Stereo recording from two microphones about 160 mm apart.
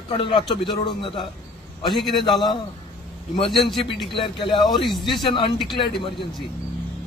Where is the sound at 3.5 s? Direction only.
Centre (ahead or behind).